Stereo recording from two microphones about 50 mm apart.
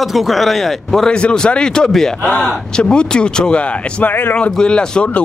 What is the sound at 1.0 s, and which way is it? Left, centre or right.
A man's voice, centre.